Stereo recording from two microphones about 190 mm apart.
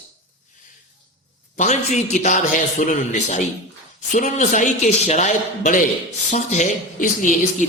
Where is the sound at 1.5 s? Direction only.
40° left (ahead or behind).